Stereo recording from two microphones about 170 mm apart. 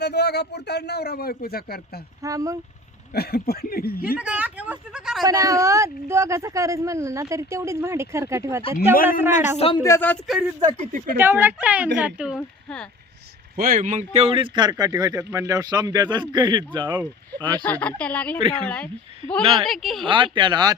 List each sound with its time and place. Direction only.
0.0 s speech: 75° left (ahead or behind)
2.2 s speech: 20° right (ahead or behind)
3.1 s speech: 65° left (ahead or behind)
4.1 s speech: 10° right (ahead or behind)
5.2 s speech: 20° right (ahead or behind)
9.6 s speech: 35° left (ahead or behind)
9.8 s a woman's voice: 15° left (ahead or behind)
10.2 s speech: 5° right (ahead or behind)
12.4 s speech: 5° left (ahead or behind)
13.6 s speech: 55° right (ahead or behind); by 17.6 s 20° right (ahead or behind)
17.6 s a woman's voice: 10° left (ahead or behind)
20.1 s speech: 30° right (ahead or behind)